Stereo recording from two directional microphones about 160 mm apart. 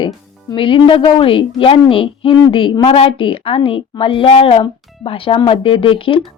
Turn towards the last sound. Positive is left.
turn(degrees=35)  # may be behind; listen again after turning